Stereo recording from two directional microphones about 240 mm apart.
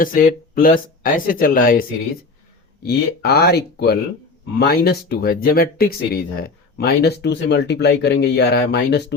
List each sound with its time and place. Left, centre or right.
0.0 s speech: left